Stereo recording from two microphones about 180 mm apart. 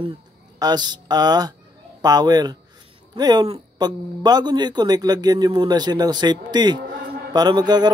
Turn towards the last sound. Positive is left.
turn(degrees=-25)  # may be behind; listen again after turning